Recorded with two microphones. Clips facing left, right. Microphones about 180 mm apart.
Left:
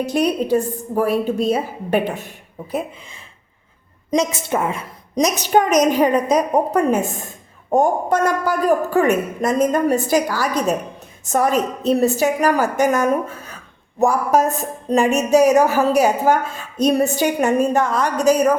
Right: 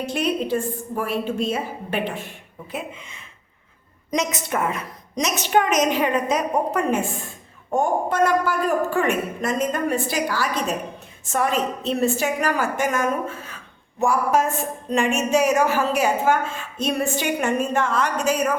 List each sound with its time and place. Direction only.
0.0 s a woman's voice: 40° left (ahead or behind)
4.1 s a woman's voice: 30° left (ahead or behind)